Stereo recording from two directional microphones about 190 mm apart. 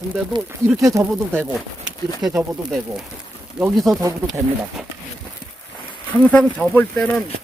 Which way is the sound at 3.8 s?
Centre (ahead or behind).